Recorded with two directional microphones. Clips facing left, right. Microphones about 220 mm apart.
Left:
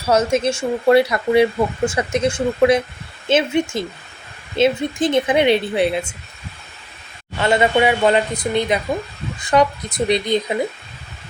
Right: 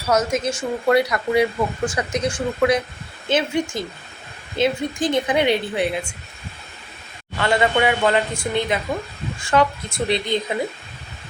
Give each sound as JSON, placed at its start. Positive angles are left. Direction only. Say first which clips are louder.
{"t": 0.1, "sound": "speech", "louder": "left 4 dB", "side_deg": 30}
{"t": 7.3, "sound": "speech", "louder": "left 3 dB", "side_deg": 20}